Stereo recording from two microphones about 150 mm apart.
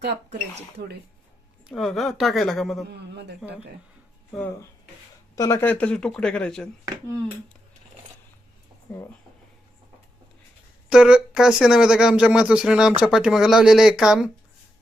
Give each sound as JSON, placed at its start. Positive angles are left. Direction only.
{"t": 0.0, "sound": "speech", "side_deg": -90}
{"t": 1.6, "sound": "speech", "side_deg": 0}
{"t": 3.2, "sound": "speech", "side_deg": -90}
{"t": 5.4, "sound": "speech", "side_deg": 20}
{"t": 8.9, "sound": "speech", "side_deg": 10}
{"t": 10.9, "sound": "speech", "side_deg": -5}